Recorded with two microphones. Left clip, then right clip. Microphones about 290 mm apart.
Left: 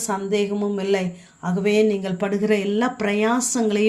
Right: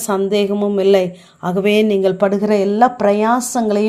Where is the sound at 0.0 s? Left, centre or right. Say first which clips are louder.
Right 6 dB; right.